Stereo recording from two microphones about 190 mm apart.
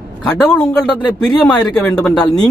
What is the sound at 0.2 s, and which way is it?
Speech, 5° left (ahead or behind).